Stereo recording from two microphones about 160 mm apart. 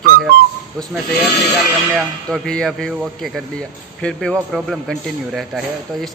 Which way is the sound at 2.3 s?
5° left (ahead or behind).